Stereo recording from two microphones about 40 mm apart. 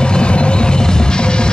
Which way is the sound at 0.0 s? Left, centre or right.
Left.